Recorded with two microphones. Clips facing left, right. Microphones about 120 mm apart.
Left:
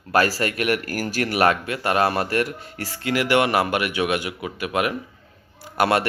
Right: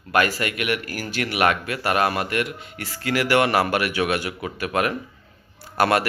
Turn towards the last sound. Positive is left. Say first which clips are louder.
# even
turn(degrees=25)  # may be behind; listen again after turning